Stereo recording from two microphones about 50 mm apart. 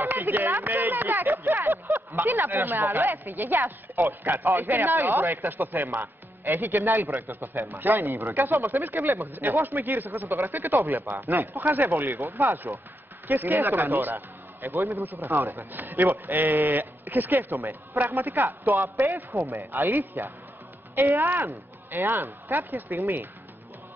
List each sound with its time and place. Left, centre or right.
0.0 s speech: right
7.2 s a man's voice: right
7.6 s a man's voice: right
13.3 s a man's voice: right
15.7 s a man's voice: right